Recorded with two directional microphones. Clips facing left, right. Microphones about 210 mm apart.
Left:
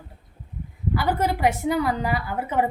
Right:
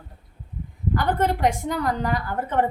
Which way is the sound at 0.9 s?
5° left (ahead or behind).